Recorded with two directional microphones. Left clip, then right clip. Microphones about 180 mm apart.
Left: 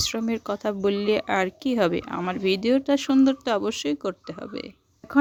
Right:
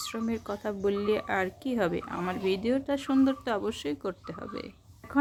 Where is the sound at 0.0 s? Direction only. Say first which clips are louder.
Left 7 dB; 50° left (ahead or behind).